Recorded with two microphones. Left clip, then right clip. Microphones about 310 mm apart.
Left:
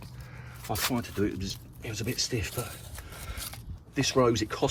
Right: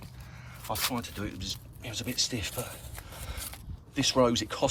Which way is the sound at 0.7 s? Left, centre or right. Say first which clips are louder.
Left 3 dB; centre.